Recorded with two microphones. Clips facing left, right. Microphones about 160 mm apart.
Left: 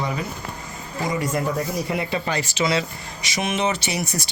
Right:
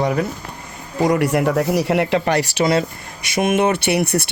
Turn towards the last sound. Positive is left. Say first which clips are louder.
# right 9 dB
turn(degrees=-60)  # may be behind; listen again after turning